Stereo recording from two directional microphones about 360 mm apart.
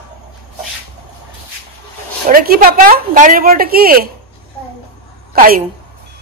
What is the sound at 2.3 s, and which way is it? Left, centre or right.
A woman's voice, right.